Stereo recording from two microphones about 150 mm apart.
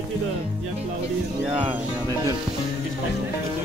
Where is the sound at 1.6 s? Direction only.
30° right (ahead or behind).